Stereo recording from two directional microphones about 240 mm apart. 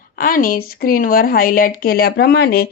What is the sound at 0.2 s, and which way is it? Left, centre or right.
A woman's voice, left.